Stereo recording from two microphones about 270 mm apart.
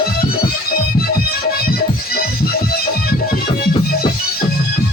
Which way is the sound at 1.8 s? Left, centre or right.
Left.